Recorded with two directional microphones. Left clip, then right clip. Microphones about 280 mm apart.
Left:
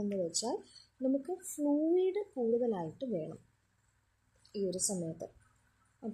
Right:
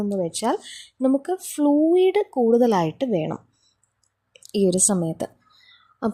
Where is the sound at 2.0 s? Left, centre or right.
Right.